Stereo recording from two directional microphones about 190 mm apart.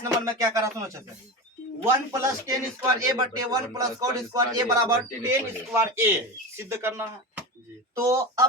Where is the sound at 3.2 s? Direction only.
20° right (ahead or behind).